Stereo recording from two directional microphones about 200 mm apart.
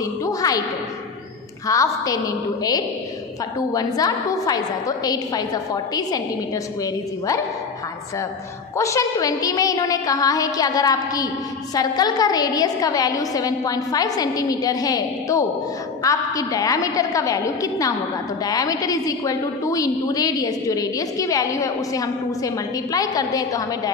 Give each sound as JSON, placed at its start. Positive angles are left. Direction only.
{"t": 0.0, "sound": "a sound", "side_deg": 15}
{"t": 1.7, "sound": "a woman's voice", "side_deg": 15}
{"t": 8.7, "sound": "a woman's voice", "side_deg": 15}